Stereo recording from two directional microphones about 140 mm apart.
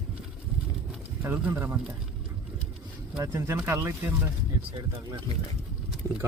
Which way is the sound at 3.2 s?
20° right (ahead or behind).